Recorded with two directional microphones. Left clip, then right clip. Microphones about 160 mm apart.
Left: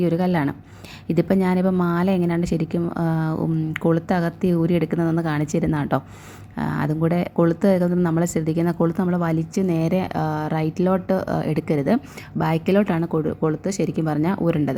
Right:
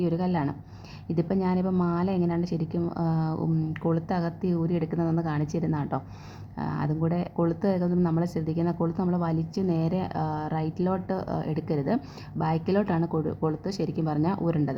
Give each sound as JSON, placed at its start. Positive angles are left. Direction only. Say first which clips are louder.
{"t": 0.0, "sound": "a woman's voice", "louder": "left 7 dB", "side_deg": 30}